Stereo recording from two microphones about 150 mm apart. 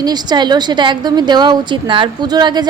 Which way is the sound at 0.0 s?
30° right (ahead or behind).